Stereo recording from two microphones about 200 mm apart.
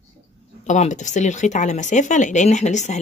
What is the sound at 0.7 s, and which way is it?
Speech, 35° left (ahead or behind).